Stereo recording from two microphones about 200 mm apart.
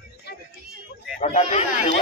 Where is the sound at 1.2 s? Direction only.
35° left (ahead or behind).